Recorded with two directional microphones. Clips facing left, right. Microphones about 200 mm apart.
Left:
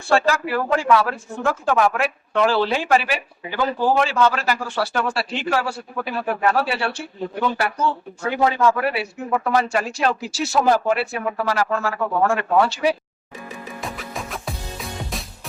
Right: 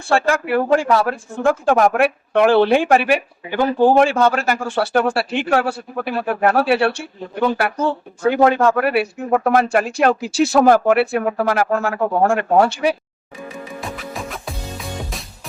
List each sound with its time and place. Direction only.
0.1 s speech: 55° right (ahead or behind)
13.8 s music: centre (ahead or behind)